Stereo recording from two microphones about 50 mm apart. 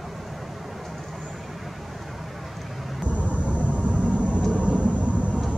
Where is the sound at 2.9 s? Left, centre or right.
Right.